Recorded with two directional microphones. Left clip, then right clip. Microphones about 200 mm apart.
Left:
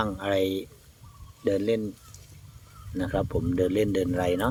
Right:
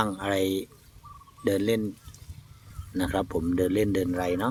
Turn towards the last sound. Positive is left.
turn(degrees=0)  # may be behind; listen again after turning